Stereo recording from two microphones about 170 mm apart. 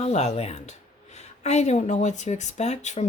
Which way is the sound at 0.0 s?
40° left (ahead or behind).